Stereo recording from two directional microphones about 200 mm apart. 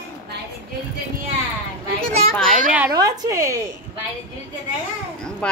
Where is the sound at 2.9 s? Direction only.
15° right (ahead or behind).